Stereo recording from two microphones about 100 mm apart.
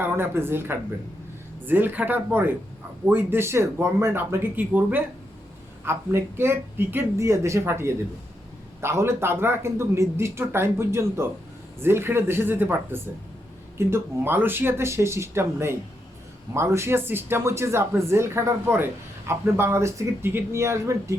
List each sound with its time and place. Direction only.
0.0 s speech: 25° right (ahead or behind)